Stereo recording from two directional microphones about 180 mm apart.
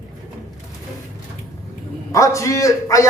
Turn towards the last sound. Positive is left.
turn(degrees=15)  # may be behind; listen again after turning